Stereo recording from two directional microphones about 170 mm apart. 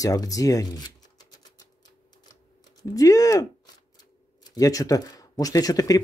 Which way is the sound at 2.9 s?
20° left (ahead or behind).